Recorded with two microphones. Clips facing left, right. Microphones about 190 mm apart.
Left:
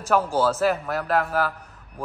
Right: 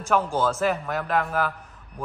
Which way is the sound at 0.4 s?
5° left (ahead or behind).